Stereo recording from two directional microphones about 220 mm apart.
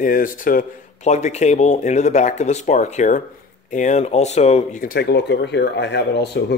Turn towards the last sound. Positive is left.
turn(degrees=50)  # may be behind; listen again after turning